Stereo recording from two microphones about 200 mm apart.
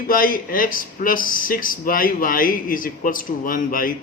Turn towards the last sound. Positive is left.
turn(degrees=45)  # may be behind; listen again after turning